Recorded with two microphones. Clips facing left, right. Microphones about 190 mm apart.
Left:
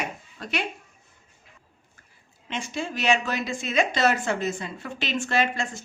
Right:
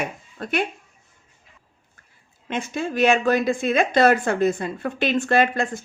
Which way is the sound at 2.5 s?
55° right (ahead or behind).